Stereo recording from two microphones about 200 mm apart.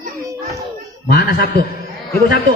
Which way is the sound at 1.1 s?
50° left (ahead or behind).